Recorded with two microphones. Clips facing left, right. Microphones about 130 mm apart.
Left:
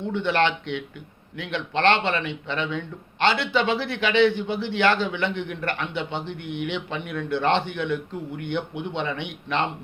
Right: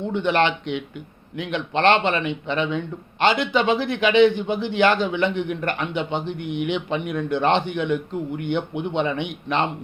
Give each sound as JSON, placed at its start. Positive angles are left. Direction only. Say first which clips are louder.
{"t": 0.1, "sound": "speech", "louder": "right 2 dB", "side_deg": -15}